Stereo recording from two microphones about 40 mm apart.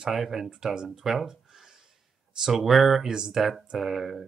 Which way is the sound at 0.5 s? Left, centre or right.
Centre.